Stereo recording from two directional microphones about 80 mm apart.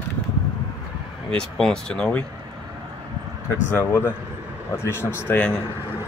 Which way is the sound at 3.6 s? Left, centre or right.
Left.